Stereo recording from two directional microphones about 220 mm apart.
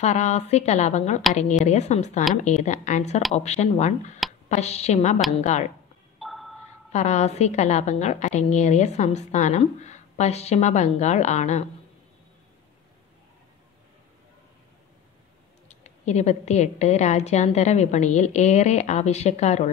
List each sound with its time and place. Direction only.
0.0 s a woman's voice: 30° left (ahead or behind)
6.1 s a sound: centre (ahead or behind)
6.9 s a woman's voice: 30° left (ahead or behind)
15.8 s a woman's voice: 30° left (ahead or behind)